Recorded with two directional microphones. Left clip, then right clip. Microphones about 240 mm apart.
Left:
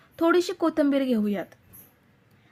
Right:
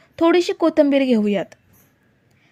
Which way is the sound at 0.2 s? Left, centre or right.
Right.